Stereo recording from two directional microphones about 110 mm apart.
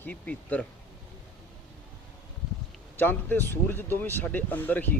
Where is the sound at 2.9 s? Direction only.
20° left (ahead or behind).